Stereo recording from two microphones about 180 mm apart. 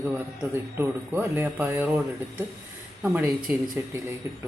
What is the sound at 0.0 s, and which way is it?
Speech, 10° right (ahead or behind).